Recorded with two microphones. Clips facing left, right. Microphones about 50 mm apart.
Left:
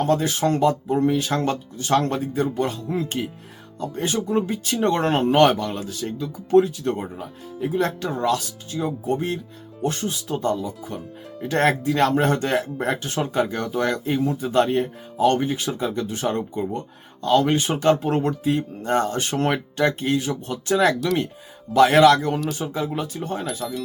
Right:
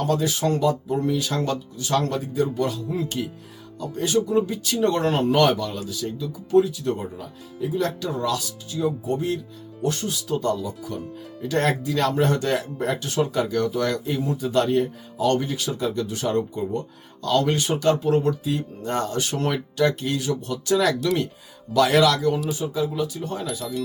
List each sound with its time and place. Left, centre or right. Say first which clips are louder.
0.0 s speech: left 2 dB; left
22.5 s speech: right 1 dB; left